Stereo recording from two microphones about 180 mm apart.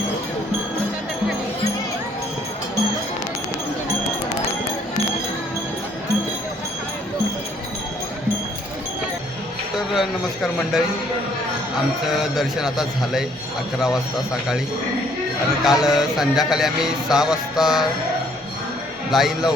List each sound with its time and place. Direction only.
9.7 s speech: centre (ahead or behind)
12.2 s speech: centre (ahead or behind)
15.6 s speech: centre (ahead or behind)
19.1 s speech: centre (ahead or behind)